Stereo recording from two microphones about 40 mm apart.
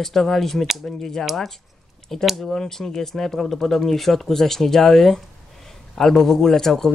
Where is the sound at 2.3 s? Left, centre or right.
Centre.